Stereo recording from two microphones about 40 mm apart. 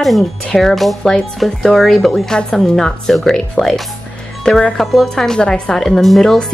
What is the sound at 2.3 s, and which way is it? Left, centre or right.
Speech, centre.